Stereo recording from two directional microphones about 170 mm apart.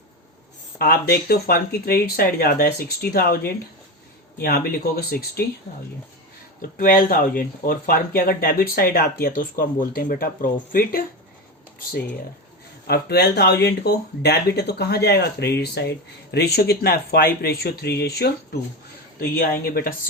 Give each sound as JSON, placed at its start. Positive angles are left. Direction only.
{"t": 0.8, "sound": "speech", "side_deg": 65}
{"t": 6.6, "sound": "speech", "side_deg": 60}
{"t": 12.9, "sound": "speech", "side_deg": 75}